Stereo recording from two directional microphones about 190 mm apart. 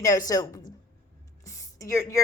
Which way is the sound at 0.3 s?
20° left (ahead or behind).